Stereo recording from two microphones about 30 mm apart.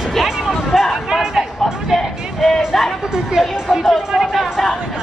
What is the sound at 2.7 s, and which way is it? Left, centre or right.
Speech, centre.